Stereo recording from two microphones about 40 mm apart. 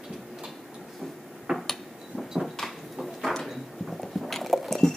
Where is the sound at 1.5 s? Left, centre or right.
Right.